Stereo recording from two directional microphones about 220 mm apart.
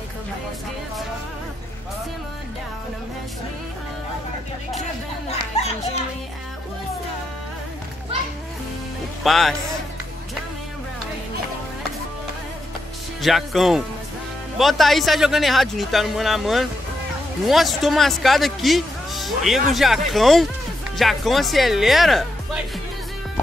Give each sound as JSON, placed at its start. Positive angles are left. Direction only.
{"t": 5.4, "sound": "children playing", "side_deg": 30}
{"t": 9.2, "sound": "speech", "side_deg": 0}
{"t": 13.2, "sound": "speech", "side_deg": 0}